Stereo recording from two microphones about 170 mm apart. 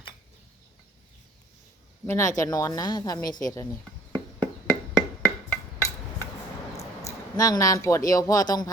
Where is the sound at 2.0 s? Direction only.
15° left (ahead or behind).